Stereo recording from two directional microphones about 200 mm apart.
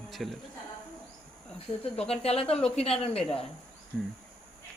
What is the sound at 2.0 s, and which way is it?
Speech, 30° left (ahead or behind).